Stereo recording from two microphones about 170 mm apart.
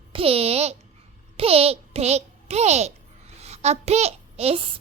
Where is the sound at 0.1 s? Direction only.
35° right (ahead or behind).